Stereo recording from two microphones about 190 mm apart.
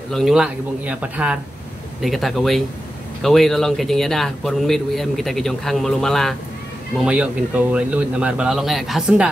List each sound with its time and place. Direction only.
0.1 s a man's voice: centre (ahead or behind)